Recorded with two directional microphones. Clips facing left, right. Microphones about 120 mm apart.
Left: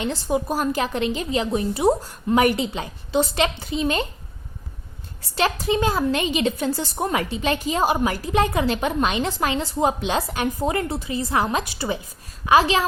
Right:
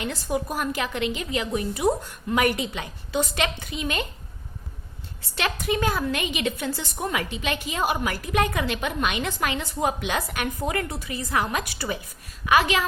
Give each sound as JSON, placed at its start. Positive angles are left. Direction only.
{"t": 0.0, "sound": "a woman's voice", "side_deg": 25}
{"t": 5.3, "sound": "a woman's voice", "side_deg": 30}